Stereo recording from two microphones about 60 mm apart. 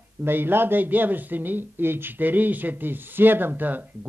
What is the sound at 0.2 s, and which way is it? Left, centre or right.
A man's voice, right.